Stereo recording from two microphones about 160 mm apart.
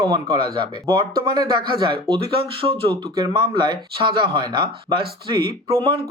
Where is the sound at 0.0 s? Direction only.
25° right (ahead or behind).